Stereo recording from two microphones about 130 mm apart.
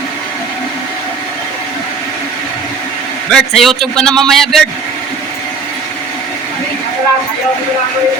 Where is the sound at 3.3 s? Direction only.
Centre (ahead or behind).